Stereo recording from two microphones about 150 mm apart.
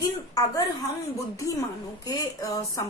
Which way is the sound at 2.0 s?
25° left (ahead or behind).